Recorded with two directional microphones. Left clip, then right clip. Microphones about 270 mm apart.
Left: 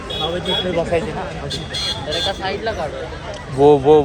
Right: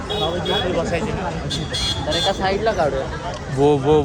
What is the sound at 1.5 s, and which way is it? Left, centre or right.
Speech, right.